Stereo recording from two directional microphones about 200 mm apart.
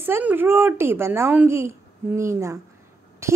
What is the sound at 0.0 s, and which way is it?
A woman's voice, 10° right (ahead or behind).